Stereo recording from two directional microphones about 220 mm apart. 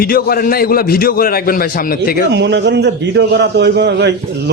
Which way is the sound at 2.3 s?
50° right (ahead or behind).